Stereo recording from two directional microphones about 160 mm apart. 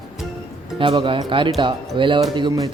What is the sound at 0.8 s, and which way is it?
Speech, 30° right (ahead or behind).